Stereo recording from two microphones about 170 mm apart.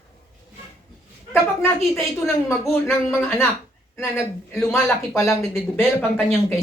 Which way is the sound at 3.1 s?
15° left (ahead or behind).